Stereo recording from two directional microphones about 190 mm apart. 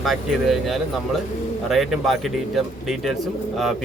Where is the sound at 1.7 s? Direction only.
Centre (ahead or behind).